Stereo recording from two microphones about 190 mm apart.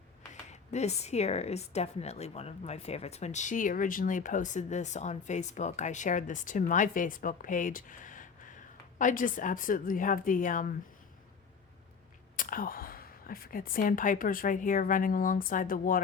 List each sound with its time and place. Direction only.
0.5 s a woman's voice: 35° left (ahead or behind)
12.4 s speech: 45° left (ahead or behind)